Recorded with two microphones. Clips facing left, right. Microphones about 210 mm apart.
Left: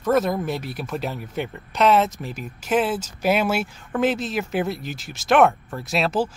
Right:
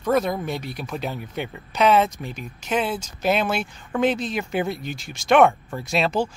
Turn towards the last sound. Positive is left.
turn(degrees=5)  # may be behind; listen again after turning